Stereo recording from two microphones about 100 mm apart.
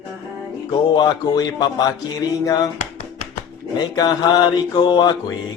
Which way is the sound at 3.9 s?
45° left (ahead or behind).